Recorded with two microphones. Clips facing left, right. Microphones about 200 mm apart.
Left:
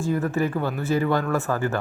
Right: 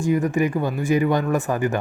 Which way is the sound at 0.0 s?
15° right (ahead or behind).